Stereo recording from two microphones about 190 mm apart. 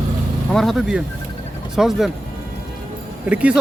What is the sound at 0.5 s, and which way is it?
A man's voice, centre (ahead or behind).